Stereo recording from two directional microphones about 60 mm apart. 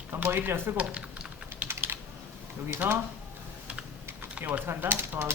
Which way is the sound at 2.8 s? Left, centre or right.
Right.